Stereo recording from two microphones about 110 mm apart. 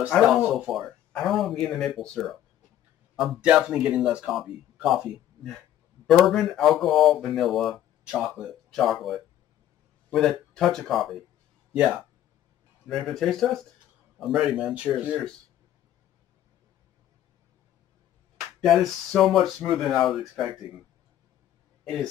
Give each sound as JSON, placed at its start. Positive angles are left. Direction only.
{"t": 0.2, "sound": "speech", "side_deg": -5}
{"t": 3.3, "sound": "speech", "side_deg": -10}
{"t": 12.8, "sound": "speech", "side_deg": 5}
{"t": 18.6, "sound": "speech", "side_deg": 0}
{"t": 21.8, "sound": "speech", "side_deg": 5}